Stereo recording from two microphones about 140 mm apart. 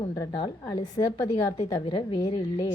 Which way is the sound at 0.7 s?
30° left (ahead or behind).